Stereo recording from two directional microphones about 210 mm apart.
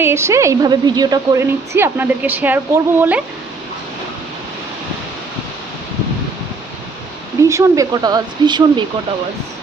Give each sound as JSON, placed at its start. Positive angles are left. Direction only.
{"t": 0.0, "sound": "a woman's voice", "side_deg": -10}
{"t": 7.4, "sound": "speech", "side_deg": -15}